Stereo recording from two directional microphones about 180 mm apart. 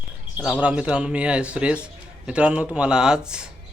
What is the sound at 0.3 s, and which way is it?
A man's voice, 5° right (ahead or behind).